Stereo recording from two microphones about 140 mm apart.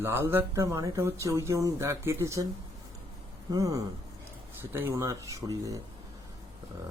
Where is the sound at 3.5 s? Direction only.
25° right (ahead or behind).